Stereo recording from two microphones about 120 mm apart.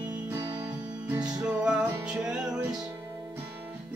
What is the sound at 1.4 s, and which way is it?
Music, 10° right (ahead or behind).